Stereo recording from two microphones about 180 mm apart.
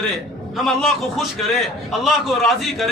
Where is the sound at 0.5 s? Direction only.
Centre (ahead or behind).